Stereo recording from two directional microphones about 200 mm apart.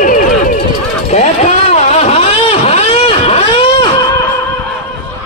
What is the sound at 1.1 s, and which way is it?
Vehicle, 35° left (ahead or behind).